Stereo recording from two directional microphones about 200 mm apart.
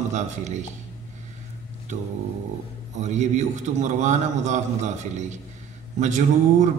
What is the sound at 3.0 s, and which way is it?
Speech, 35° right (ahead or behind).